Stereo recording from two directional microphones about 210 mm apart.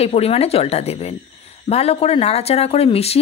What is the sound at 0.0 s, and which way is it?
A woman's voice, 30° left (ahead or behind).